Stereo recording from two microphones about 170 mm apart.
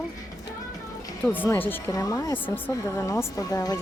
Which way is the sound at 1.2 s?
10° left (ahead or behind).